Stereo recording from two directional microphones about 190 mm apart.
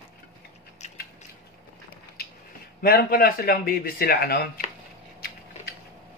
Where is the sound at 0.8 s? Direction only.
35° left (ahead or behind).